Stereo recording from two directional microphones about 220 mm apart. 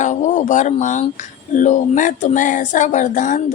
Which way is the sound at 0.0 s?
35° left (ahead or behind).